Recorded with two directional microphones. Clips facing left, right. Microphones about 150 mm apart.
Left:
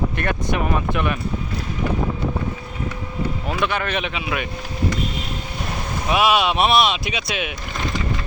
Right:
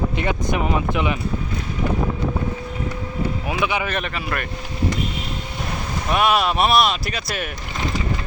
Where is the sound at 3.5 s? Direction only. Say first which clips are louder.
Left 1 dB; 10° right (ahead or behind).